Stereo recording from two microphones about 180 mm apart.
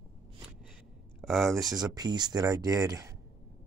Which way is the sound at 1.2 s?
Centre (ahead or behind).